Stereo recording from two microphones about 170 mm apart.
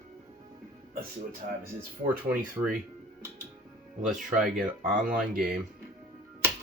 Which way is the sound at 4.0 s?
Centre (ahead or behind).